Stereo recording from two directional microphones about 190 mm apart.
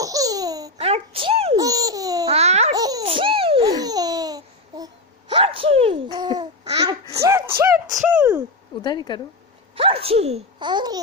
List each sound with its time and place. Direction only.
0.0 s babbling: 20° right (ahead or behind)
0.8 s a sound: 30° right (ahead or behind)
1.5 s babbling: 20° right (ahead or behind)
2.3 s baby laughter: 35° right (ahead or behind)
2.7 s laughter: 20° right (ahead or behind)
5.3 s gasp: 30° right (ahead or behind)
7.2 s a sound: 15° right (ahead or behind)
7.6 s music: 15° right (ahead or behind)
7.9 s a sound: 10° right (ahead or behind)
8.8 s speech: 25° left (ahead or behind)
9.7 s a child's voice: 30° right (ahead or behind)